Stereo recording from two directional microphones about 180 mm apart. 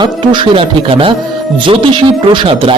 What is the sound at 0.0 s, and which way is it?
Speech, 25° right (ahead or behind).